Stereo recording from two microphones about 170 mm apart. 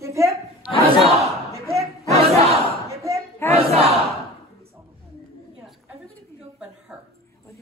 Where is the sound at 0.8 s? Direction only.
35° right (ahead or behind).